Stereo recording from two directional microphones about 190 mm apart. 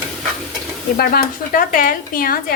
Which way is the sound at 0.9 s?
50° left (ahead or behind).